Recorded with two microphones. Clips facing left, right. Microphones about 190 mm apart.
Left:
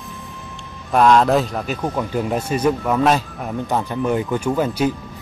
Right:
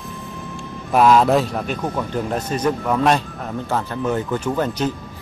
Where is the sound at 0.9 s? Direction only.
5° right (ahead or behind).